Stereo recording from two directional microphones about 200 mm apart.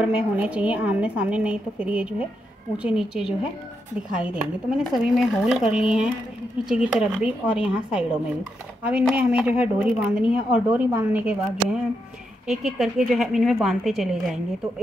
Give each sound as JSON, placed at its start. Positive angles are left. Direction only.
{"t": 0.0, "sound": "a woman's voice", "side_deg": -5}